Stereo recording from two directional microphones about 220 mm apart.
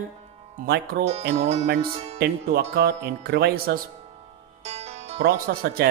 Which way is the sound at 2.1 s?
45° right (ahead or behind).